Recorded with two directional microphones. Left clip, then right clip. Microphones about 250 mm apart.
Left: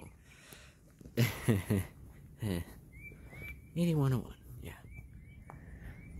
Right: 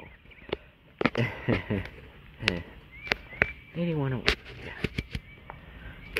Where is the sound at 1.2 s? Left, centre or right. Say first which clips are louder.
Right 5 dB; left.